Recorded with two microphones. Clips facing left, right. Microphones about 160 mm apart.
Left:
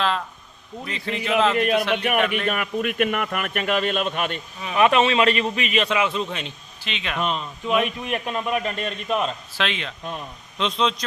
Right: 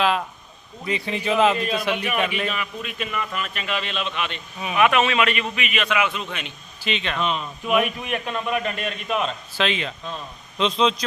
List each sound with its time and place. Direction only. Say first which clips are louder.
0.9 s a man's voice: right 2 dB; 15° right (ahead or behind)
1.5 s speech: left 5 dB; 65° left (ahead or behind)
1.8 s a man's voice: left 1 dB; 10° right (ahead or behind)
2.5 s a man's voice: left 6 dB; 55° left (ahead or behind)
4.8 s a man's voice: left 2 dB; 30° left (ahead or behind)
6.8 s a man's voice: right 2 dB; centre (ahead or behind)
7.7 s a man's voice: right 1 dB; 5° right (ahead or behind)
8.7 s a man's voice: left 1 dB; 35° left (ahead or behind)
9.0 s a man's voice: left 1 dB; centre (ahead or behind)